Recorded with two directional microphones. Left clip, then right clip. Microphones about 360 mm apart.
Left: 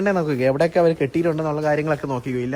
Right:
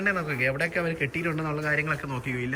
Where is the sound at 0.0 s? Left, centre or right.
Centre.